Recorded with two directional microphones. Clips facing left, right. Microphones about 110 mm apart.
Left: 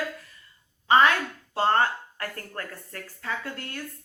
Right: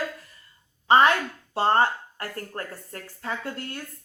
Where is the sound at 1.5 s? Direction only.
25° right (ahead or behind).